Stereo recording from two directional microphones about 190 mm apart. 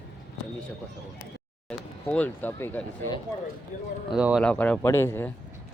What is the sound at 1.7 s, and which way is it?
Speech, 5° left (ahead or behind).